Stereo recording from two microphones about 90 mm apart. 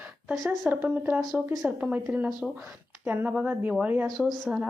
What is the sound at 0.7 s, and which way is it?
A woman's voice, 20° right (ahead or behind).